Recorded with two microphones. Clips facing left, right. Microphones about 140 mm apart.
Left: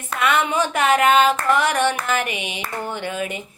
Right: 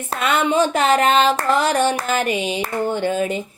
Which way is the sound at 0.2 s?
30° right (ahead or behind).